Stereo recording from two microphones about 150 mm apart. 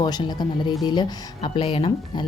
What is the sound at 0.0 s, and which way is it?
Speech, 30° left (ahead or behind).